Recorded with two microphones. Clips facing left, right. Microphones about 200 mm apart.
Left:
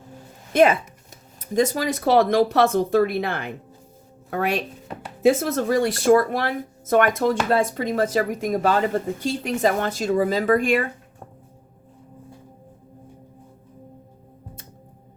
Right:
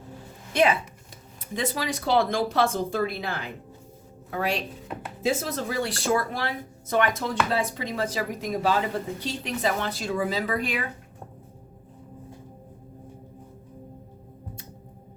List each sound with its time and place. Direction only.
0.5 s speech: 45° left (ahead or behind)